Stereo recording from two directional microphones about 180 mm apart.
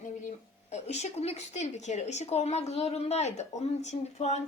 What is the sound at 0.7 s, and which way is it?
Speech, 40° left (ahead or behind).